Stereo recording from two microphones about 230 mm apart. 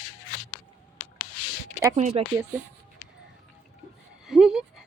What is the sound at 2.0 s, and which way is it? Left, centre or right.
Speech, right.